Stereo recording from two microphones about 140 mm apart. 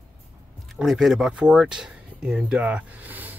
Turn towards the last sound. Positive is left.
turn(degrees=-10)  # may be behind; listen again after turning